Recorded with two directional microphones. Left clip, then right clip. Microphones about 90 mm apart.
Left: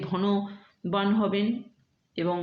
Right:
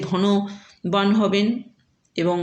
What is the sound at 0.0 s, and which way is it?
A man's voice, 25° right (ahead or behind).